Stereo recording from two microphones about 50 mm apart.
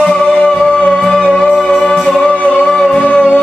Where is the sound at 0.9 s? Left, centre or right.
Centre.